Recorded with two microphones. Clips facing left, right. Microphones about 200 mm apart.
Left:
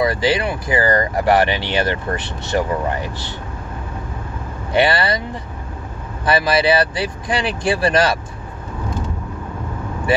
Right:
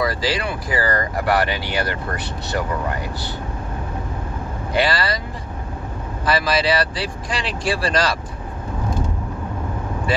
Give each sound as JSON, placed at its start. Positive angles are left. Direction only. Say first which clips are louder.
{"t": 0.0, "sound": "speech", "louder": "left 4 dB", "side_deg": 25}
{"t": 4.7, "sound": "speech", "louder": "left 4 dB", "side_deg": 25}
{"t": 6.2, "sound": "speech", "louder": "left 3 dB", "side_deg": 25}